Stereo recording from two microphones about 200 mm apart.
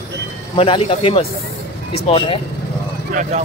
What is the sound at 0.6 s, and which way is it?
Speech, 30° left (ahead or behind).